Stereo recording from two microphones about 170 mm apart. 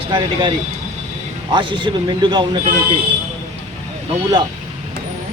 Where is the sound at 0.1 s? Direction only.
30° right (ahead or behind).